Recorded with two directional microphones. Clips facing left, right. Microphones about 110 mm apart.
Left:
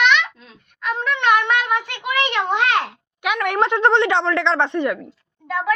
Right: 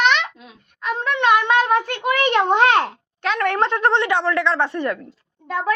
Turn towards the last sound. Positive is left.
turn(degrees=-30)  # may be behind; listen again after turning